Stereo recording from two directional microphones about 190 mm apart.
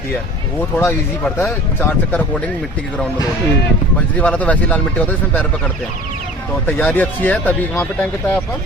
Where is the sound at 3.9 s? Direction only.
5° left (ahead or behind).